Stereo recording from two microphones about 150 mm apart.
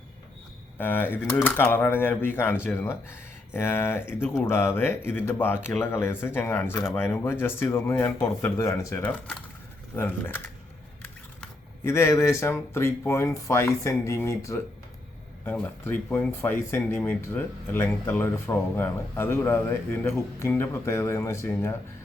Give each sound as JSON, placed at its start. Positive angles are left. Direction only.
{"t": 0.8, "sound": "speech", "side_deg": 15}